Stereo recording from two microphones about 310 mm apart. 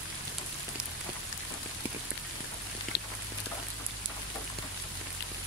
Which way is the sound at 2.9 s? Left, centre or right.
Left.